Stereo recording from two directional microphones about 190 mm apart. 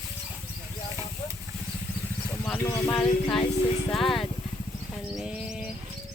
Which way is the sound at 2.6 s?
20° left (ahead or behind).